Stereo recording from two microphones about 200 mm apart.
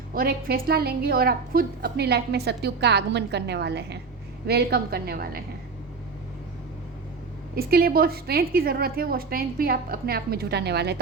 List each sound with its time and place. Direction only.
0.1 s a woman's voice: 50° right (ahead or behind)
7.5 s a woman's voice: 50° right (ahead or behind)